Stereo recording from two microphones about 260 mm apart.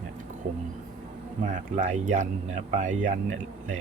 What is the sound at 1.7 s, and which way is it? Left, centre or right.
Speech, right.